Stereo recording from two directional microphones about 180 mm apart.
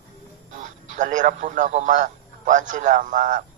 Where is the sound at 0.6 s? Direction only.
45° right (ahead or behind).